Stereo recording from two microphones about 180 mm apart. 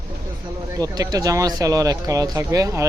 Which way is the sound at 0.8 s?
20° right (ahead or behind).